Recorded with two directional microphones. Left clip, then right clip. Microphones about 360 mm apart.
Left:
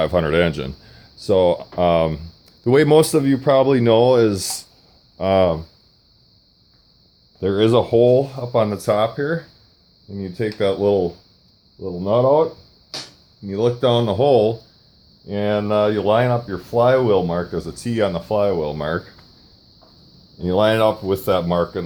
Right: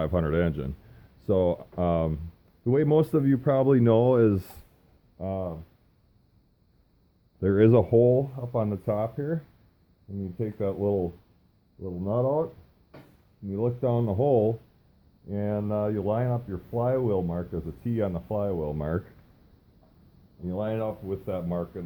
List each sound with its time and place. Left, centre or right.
0.0 s speech: centre
5.1 s speech: centre
7.3 s speech: centre
13.5 s speech: centre
20.5 s speech: left